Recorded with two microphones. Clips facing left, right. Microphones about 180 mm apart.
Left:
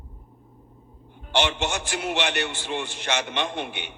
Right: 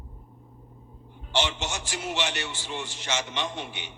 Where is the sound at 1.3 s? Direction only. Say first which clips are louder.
Left 4 dB; 60° left (ahead or behind).